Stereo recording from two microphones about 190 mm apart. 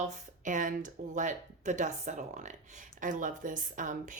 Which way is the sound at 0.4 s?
40° right (ahead or behind).